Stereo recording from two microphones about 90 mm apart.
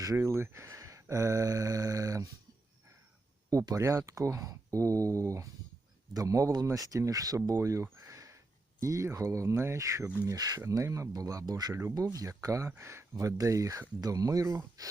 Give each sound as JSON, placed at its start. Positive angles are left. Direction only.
{"t": 0.0, "sound": "speech", "side_deg": -35}
{"t": 3.5, "sound": "speech", "side_deg": -35}
{"t": 11.7, "sound": "speech", "side_deg": -30}
{"t": 11.9, "sound": "speech", "side_deg": -40}